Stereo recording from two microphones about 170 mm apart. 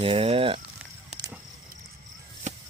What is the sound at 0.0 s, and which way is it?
Speech, 35° right (ahead or behind).